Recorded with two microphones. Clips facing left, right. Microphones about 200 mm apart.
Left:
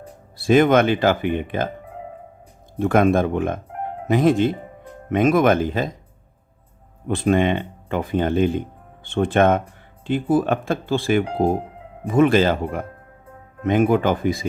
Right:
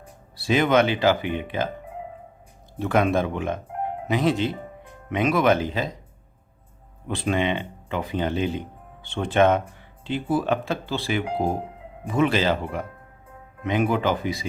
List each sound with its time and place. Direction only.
0.3 s speech: 50° left (ahead or behind)
2.7 s speech: 50° left (ahead or behind)
7.1 s speech: 50° left (ahead or behind)